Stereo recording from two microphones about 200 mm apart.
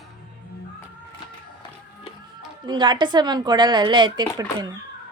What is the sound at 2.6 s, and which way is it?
Speech, 20° right (ahead or behind).